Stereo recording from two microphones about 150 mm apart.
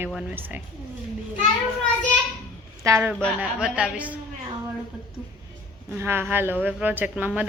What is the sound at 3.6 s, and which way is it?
Speech, 10° right (ahead or behind).